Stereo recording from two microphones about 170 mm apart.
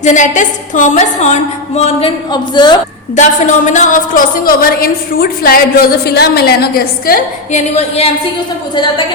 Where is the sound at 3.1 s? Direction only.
45° left (ahead or behind).